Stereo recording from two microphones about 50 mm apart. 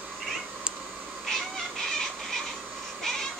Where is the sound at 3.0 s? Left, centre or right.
Centre.